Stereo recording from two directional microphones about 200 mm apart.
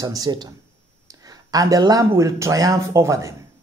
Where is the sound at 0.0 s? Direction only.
20° right (ahead or behind).